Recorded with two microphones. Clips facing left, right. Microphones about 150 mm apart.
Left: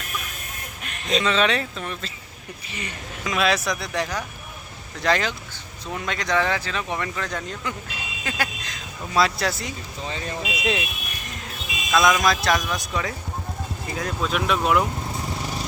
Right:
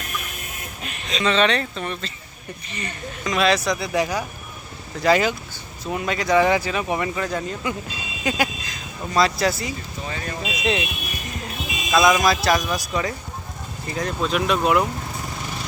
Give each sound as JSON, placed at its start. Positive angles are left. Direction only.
{"t": 1.2, "sound": "speech", "side_deg": 0}
{"t": 8.6, "sound": "speech", "side_deg": 0}
{"t": 10.1, "sound": "speech", "side_deg": 25}
{"t": 10.4, "sound": "speech", "side_deg": 5}
{"t": 11.9, "sound": "speech", "side_deg": -5}